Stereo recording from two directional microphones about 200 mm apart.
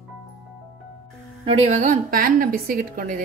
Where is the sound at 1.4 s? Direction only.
30° right (ahead or behind).